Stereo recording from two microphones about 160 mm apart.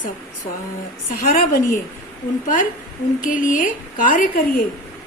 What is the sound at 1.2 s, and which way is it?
Speech, 60° left (ahead or behind).